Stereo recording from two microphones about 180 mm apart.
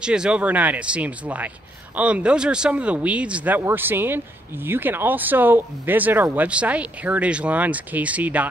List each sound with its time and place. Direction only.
0.0 s speech: 5° right (ahead or behind)